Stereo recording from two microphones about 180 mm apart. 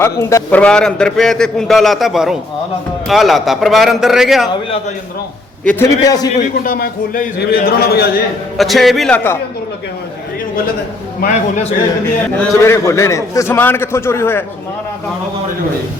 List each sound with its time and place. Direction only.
0.0 s a man's voice: 15° left (ahead or behind); by 4.4 s centre (ahead or behind)
5.6 s a man's voice: 15° left (ahead or behind)
6.7 s a man's voice: 55° left (ahead or behind)
8.5 s a man's voice: centre (ahead or behind)
11.2 s a man's voice: 45° left (ahead or behind)
12.4 s a man's voice: 15° left (ahead or behind)